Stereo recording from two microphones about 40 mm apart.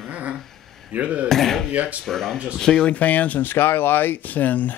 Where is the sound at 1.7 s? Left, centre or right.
Right.